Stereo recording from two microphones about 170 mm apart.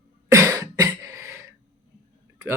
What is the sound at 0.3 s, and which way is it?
Cough, 15° right (ahead or behind).